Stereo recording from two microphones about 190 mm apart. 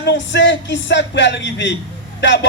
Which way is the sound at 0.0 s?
70° left (ahead or behind).